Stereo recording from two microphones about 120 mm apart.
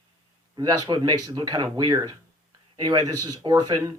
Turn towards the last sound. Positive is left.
turn(degrees=-35)  # may be behind; listen again after turning